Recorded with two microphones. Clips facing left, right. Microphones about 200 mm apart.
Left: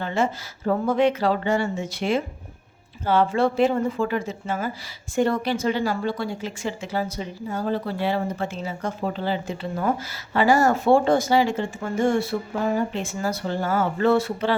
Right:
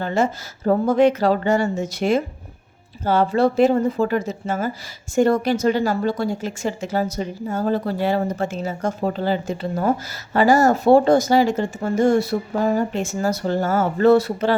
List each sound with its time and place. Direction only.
0.0 s a woman's voice: 40° right (ahead or behind)